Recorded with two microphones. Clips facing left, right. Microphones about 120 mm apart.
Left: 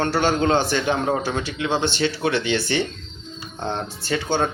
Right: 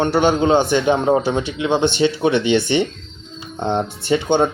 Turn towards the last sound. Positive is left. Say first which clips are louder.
# right 6 dB
turn(degrees=-20)  # may be behind; listen again after turning